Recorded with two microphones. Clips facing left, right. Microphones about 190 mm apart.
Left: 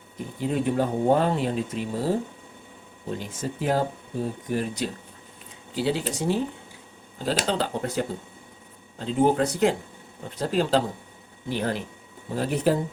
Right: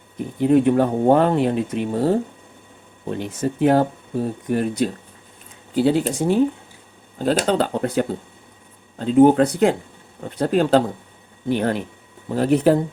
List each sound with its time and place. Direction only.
0.3 s speech: 60° right (ahead or behind)